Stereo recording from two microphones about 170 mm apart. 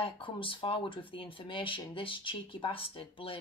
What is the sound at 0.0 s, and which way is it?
Speech, 30° left (ahead or behind).